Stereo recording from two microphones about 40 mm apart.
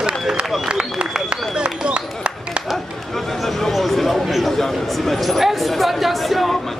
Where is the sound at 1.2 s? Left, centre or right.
Right.